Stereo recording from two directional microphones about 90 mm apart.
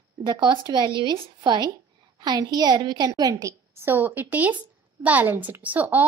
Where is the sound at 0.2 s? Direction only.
60° right (ahead or behind); by 3.5 s 40° right (ahead or behind).